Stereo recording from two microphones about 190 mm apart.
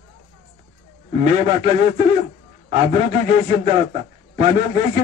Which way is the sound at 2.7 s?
35° right (ahead or behind).